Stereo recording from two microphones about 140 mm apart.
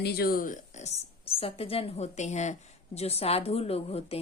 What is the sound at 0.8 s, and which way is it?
Speech, 45° left (ahead or behind).